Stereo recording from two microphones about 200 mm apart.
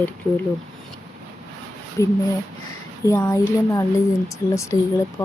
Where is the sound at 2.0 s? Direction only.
15° left (ahead or behind).